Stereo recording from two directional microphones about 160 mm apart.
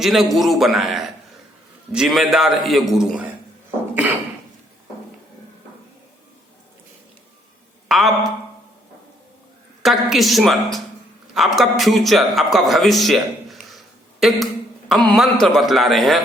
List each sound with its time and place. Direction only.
0.0 s a man's voice: centre (ahead or behind)
7.9 s speech: centre (ahead or behind)
9.8 s a man's voice: centre (ahead or behind)